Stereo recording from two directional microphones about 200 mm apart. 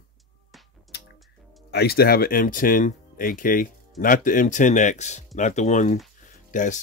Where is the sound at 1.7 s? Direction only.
50° left (ahead or behind).